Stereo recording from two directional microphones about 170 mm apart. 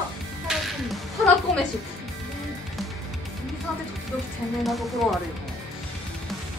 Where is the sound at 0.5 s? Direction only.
Centre (ahead or behind).